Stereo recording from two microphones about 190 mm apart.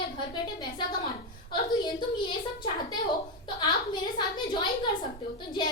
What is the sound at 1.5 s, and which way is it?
A woman's voice, 25° left (ahead or behind).